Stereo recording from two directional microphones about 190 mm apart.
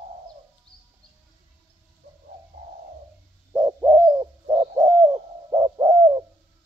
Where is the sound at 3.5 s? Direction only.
15° right (ahead or behind).